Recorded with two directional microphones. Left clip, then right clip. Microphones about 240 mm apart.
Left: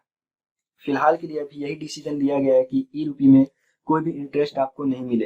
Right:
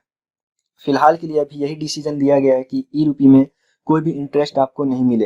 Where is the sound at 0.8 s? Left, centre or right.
Right.